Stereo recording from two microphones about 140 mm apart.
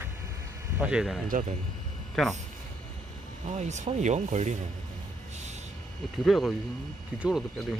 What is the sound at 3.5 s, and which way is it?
Speech, 55° right (ahead or behind).